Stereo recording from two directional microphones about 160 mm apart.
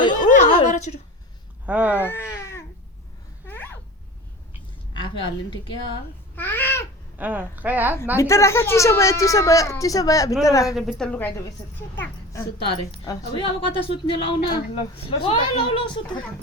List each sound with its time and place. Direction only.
0.0 s a sound: 30° left (ahead or behind)
0.6 s a sound: 45° left (ahead or behind)
1.6 s speech: 10° right (ahead or behind)
2.0 s speech: 15° left (ahead or behind)
3.4 s a sound: 10° left (ahead or behind)
5.0 s a woman's voice: 30° left (ahead or behind)
6.3 s speech: 15° left (ahead or behind)
7.2 s speech: 10° right (ahead or behind)
8.1 s speech: 20° left (ahead or behind)
10.8 s a woman's voice: centre (ahead or behind)
12.7 s a woman's voice: 30° left (ahead or behind)